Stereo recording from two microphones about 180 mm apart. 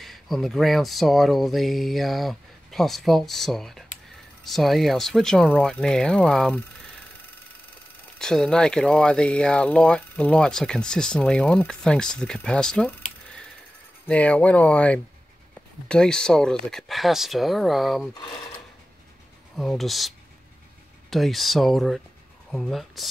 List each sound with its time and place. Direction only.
0.0 s speech: centre (ahead or behind)
8.2 s speech: 5° left (ahead or behind)
19.5 s speech: centre (ahead or behind)